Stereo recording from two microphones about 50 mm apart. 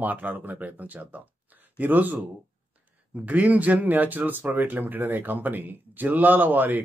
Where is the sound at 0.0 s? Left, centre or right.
Right.